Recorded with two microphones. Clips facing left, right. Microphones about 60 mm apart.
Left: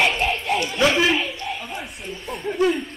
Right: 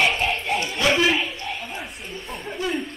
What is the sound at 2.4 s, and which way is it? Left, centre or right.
Speech, left.